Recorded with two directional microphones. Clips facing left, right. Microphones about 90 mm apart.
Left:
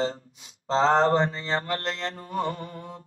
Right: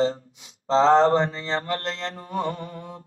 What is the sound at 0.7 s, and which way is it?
Mantra, 35° right (ahead or behind).